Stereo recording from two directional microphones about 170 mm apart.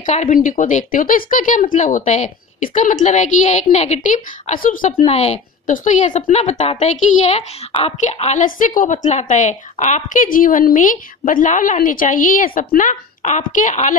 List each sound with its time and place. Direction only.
0.0 s speech: 50° left (ahead or behind)
5.0 s a woman's voice: 35° left (ahead or behind)